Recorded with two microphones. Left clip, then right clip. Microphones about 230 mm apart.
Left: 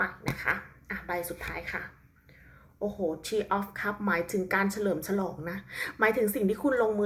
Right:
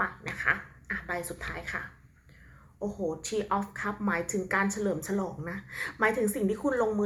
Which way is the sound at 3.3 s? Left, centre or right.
Centre.